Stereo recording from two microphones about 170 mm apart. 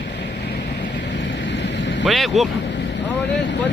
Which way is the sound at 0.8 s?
90° left.